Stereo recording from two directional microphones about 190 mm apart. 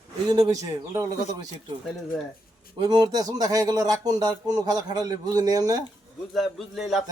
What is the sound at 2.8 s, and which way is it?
Speech, 20° right (ahead or behind).